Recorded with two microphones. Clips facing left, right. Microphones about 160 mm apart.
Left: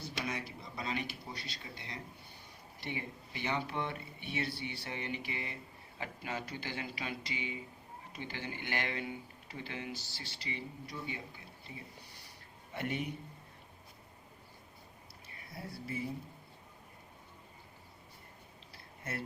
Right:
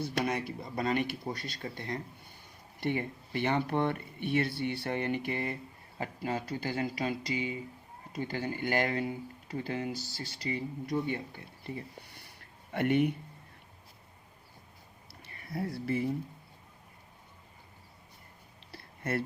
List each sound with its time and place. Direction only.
0.1 s speech: 55° right (ahead or behind)
6.0 s speech: 35° right (ahead or behind)
10.9 s speech: 55° right (ahead or behind)
12.7 s speech: 60° right (ahead or behind)
15.3 s speech: 65° right (ahead or behind)